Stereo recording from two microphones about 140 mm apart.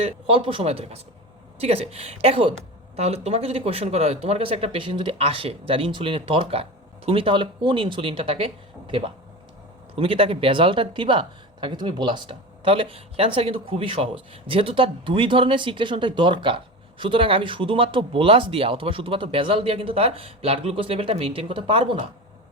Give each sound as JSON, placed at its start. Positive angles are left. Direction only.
{"t": 0.0, "sound": "a woman's voice", "side_deg": -40}